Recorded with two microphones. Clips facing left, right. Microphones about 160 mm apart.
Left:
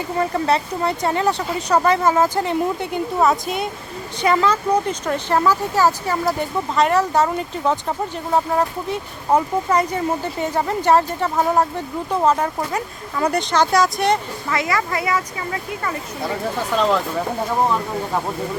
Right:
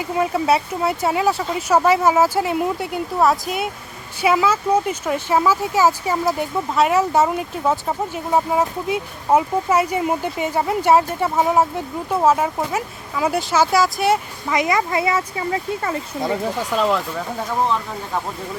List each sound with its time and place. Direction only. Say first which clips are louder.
0.2 s speech: right 1 dB; 10° right (ahead or behind)
14.5 s speech: right 3 dB; 20° right (ahead or behind)